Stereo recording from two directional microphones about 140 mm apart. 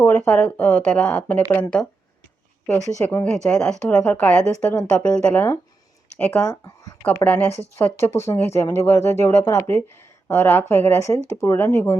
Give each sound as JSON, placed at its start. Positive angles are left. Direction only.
{"t": 0.0, "sound": "speech", "side_deg": 10}
{"t": 3.0, "sound": "speech", "side_deg": 15}